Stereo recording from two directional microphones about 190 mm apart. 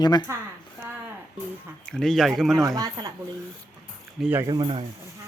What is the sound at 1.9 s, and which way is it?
Speech, 5° left (ahead or behind).